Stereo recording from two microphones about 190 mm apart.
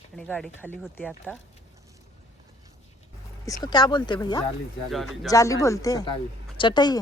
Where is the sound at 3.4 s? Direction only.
20° left (ahead or behind).